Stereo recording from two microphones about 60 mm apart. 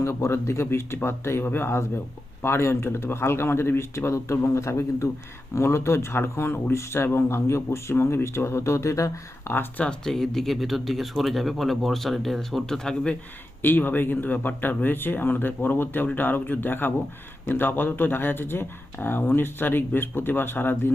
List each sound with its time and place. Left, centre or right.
0.0 s a man's voice: left
9.5 s speech: left
9.8 s speech: centre
13.6 s speech: left